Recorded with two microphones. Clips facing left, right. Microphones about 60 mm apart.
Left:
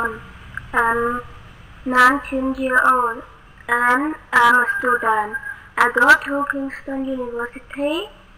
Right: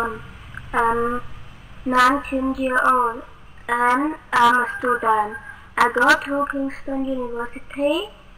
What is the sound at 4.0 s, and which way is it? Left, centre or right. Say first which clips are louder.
Speech: left 1 dB; centre.